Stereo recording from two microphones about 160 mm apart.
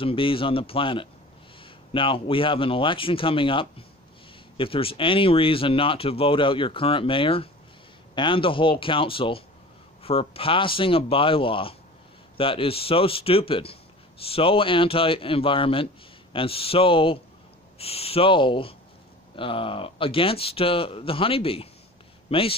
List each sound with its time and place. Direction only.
0.0 s speech: 35° left (ahead or behind)